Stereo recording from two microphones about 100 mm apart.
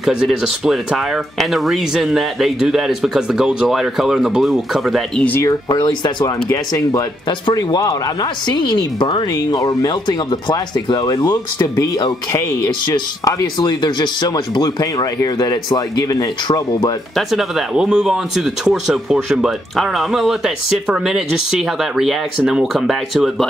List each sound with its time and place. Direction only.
0.0 s speech: 5° right (ahead or behind)
5.4 s speech: 40° left (ahead or behind)
9.5 s speech: 35° left (ahead or behind)
17.3 s speech: centre (ahead or behind)